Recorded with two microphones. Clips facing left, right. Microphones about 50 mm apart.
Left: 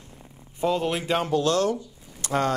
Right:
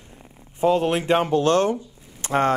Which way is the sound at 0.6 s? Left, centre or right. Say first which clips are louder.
Right 5 dB; right.